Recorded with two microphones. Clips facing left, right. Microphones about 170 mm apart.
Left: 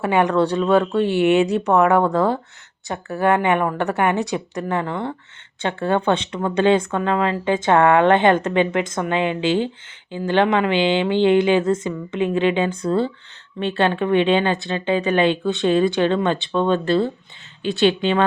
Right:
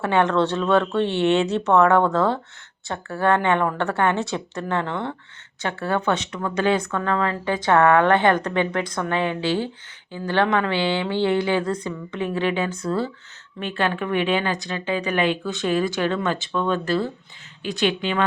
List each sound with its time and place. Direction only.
0.0 s speech: 15° left (ahead or behind)
5.6 s a woman's voice: 25° left (ahead or behind)